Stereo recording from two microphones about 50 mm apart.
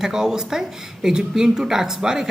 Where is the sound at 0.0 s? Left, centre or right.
Centre.